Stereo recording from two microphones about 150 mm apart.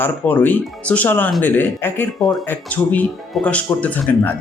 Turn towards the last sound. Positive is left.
turn(degrees=10)  # may be behind; listen again after turning